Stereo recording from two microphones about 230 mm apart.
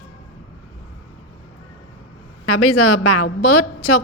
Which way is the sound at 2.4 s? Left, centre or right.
Left.